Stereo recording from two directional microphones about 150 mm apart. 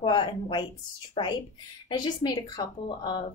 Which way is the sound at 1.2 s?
40° left (ahead or behind).